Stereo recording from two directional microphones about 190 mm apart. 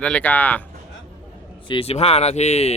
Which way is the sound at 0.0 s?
5° left (ahead or behind).